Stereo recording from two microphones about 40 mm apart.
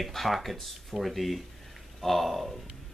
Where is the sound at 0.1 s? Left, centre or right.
Centre.